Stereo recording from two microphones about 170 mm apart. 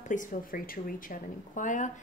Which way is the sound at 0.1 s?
50° left (ahead or behind).